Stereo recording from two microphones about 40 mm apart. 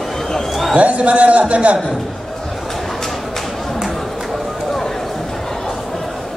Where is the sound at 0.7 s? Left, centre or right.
Right.